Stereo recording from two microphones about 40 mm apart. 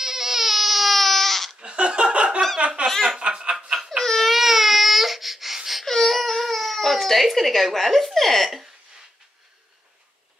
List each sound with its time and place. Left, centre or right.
0.0 s baby cry: centre
1.6 s snicker: right
4.0 s baby cry: centre
4.3 s baby cry: centre
5.9 s baby cry: centre